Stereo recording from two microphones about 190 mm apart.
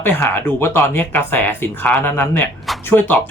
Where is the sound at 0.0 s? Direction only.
10° left (ahead or behind).